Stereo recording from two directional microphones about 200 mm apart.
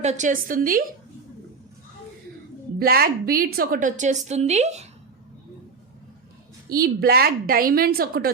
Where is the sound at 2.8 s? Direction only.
50° right (ahead or behind); by 4.8 s 35° right (ahead or behind).